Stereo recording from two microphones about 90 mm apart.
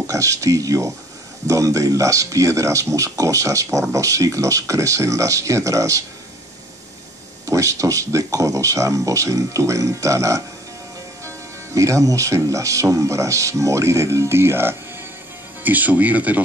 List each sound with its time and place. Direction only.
0.0 s speech: 35° right (ahead or behind)
7.4 s speech: 35° right (ahead or behind); by 16.4 s 15° right (ahead or behind)